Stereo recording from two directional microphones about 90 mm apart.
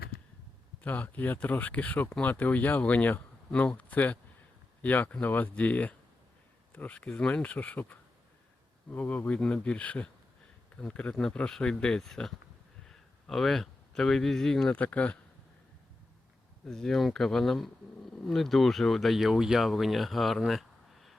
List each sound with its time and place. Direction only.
0.8 s speech: 20° left (ahead or behind)
14.7 s speech: 15° left (ahead or behind)
16.6 s speech: 5° left (ahead or behind)